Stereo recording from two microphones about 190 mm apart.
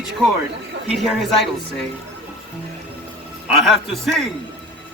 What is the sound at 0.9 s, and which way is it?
Speech, centre (ahead or behind).